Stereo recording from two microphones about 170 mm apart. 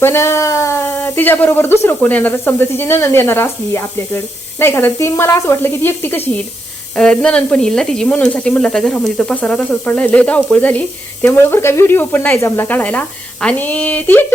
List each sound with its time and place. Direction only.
0.0 s speech: 15° left (ahead or behind)